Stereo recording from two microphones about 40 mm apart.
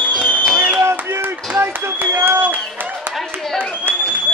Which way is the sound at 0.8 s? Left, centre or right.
Right.